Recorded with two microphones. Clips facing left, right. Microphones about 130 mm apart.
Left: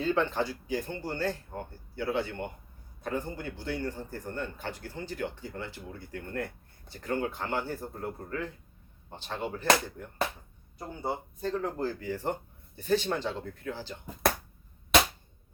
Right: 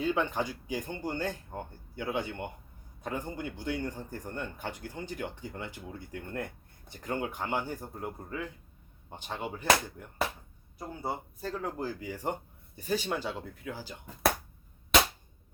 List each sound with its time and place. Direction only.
0.0 s a man's voice: 15° right (ahead or behind)
10.8 s a man's voice: 5° right (ahead or behind)